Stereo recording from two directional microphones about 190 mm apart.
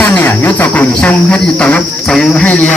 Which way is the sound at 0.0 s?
10° left (ahead or behind).